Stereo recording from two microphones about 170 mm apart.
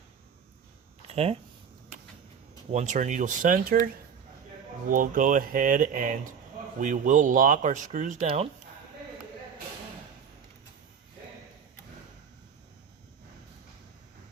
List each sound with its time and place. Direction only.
1.0 s speech: 35° right (ahead or behind)
2.7 s speech: 45° right (ahead or behind)
4.9 s speech: 50° right (ahead or behind)